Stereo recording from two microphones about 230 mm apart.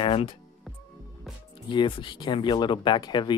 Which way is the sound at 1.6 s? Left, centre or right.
Left.